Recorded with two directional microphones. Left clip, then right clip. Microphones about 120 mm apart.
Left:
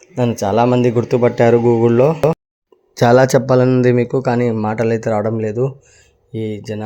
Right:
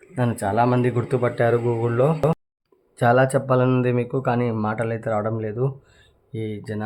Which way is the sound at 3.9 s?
55° left (ahead or behind).